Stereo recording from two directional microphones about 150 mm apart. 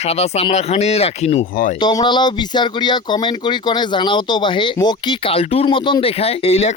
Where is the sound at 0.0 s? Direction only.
45° left (ahead or behind).